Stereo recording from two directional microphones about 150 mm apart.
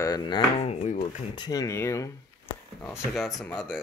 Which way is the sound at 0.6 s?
45° left (ahead or behind).